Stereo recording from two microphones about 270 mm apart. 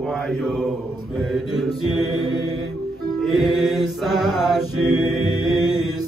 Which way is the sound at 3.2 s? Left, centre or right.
Centre.